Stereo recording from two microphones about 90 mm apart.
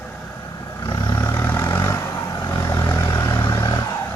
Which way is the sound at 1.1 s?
30° left (ahead or behind).